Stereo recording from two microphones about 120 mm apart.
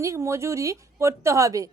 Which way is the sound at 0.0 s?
25° right (ahead or behind).